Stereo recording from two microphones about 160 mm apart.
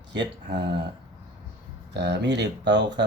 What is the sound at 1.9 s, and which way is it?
Speech, 90° right.